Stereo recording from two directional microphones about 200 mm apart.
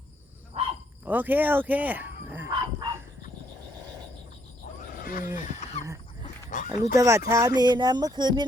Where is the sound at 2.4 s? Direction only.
20° right (ahead or behind).